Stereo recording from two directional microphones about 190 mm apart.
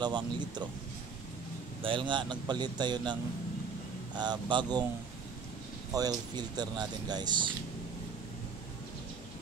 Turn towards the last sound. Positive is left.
turn(degrees=-20)  # may be behind; listen again after turning